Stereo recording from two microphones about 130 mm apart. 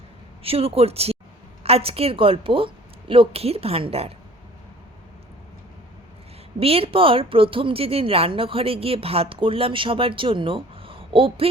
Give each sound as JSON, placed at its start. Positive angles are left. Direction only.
{"t": 0.4, "sound": "speech", "side_deg": -50}
{"t": 6.6, "sound": "speech", "side_deg": -45}